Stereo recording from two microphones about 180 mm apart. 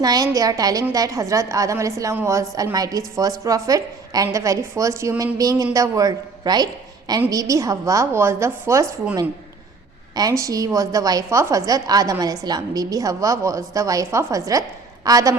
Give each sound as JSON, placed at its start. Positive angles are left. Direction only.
{"t": 0.0, "sound": "a woman's voice", "side_deg": -20}